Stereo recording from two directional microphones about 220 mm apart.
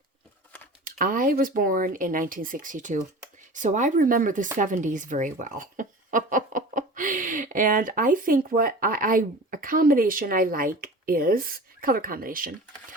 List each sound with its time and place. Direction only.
0.9 s speech: 40° right (ahead or behind)